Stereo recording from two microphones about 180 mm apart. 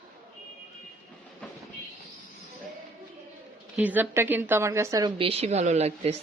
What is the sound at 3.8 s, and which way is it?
Speech, 10° right (ahead or behind).